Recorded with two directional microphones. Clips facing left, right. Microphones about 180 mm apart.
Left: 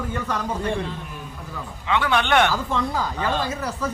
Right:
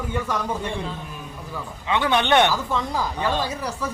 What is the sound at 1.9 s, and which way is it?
Speech, 20° right (ahead or behind).